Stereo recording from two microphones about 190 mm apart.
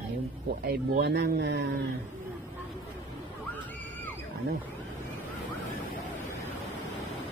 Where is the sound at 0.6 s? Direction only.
60° right (ahead or behind).